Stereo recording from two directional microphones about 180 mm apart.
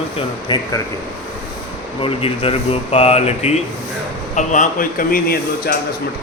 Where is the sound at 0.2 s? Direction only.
25° left (ahead or behind).